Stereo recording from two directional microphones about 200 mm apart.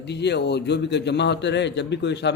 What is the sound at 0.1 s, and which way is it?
A man's voice, 60° left (ahead or behind).